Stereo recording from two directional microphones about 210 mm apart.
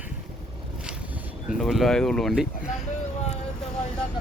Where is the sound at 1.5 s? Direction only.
Centre (ahead or behind).